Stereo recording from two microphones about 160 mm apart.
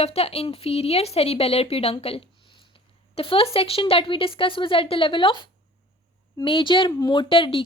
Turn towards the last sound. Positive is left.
turn(degrees=35)  # may be behind; listen again after turning